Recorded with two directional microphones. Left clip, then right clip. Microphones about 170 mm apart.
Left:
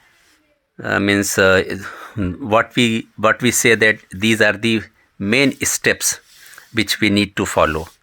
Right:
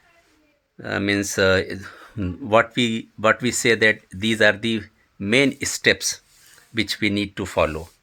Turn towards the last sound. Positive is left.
turn(degrees=40)  # may be behind; listen again after turning